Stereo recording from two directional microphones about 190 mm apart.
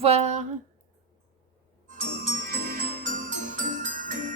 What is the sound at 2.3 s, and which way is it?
Music, 45° right (ahead or behind).